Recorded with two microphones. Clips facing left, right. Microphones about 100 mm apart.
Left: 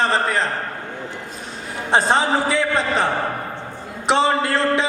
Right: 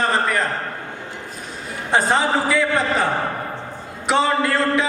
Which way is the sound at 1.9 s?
20° left (ahead or behind).